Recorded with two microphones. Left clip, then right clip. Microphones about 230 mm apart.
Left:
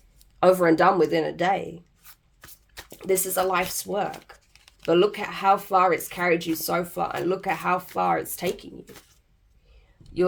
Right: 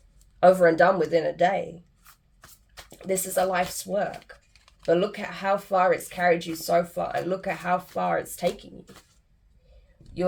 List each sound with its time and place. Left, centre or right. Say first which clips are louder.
0.3 s speech: right 1 dB; left
2.9 s speech: left 2 dB; left